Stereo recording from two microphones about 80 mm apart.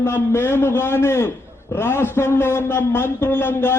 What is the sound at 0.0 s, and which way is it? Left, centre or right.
A man's voice, left.